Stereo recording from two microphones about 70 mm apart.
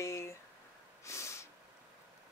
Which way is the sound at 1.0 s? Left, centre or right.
Left.